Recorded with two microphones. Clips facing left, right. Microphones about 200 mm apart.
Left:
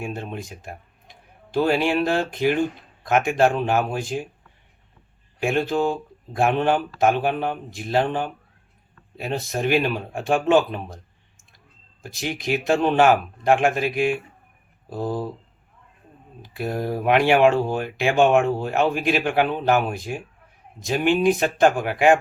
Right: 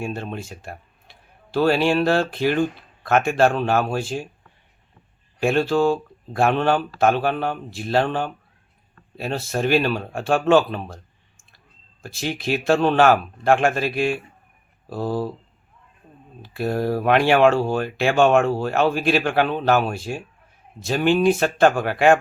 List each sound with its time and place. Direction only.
0.0 s a man's voice: 15° left (ahead or behind)
5.4 s speech: 15° left (ahead or behind)
12.0 s speech: 15° left (ahead or behind)
16.4 s speech: 15° left (ahead or behind)